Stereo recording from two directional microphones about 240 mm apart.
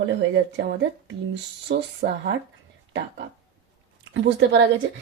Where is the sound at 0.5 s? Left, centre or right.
Right.